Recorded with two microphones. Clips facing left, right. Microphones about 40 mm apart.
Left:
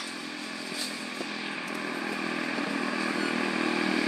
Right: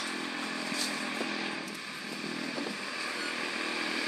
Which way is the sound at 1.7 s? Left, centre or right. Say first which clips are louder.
Left 7 dB; left.